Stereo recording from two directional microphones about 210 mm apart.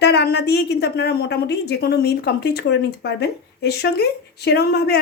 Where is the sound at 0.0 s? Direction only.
50° left (ahead or behind).